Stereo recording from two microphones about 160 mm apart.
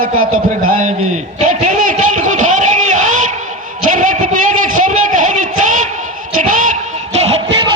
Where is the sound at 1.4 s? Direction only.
50° right (ahead or behind).